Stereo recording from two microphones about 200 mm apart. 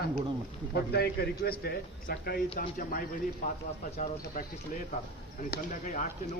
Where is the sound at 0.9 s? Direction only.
50° left (ahead or behind).